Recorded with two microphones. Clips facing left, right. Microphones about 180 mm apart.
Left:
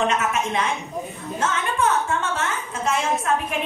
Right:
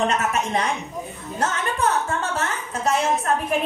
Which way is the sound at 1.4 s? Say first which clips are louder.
Even; 40° right (ahead or behind).